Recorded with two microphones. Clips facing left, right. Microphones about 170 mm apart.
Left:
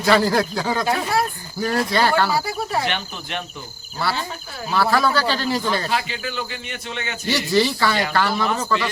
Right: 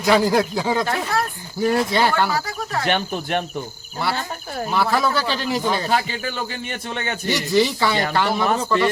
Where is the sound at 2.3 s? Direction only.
10° left (ahead or behind).